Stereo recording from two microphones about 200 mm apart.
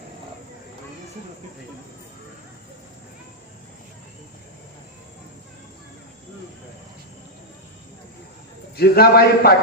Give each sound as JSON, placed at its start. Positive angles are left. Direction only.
{"t": 8.7, "sound": "a man's voice", "side_deg": 50}